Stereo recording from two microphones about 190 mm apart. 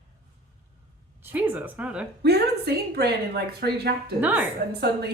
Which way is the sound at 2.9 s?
60° right (ahead or behind).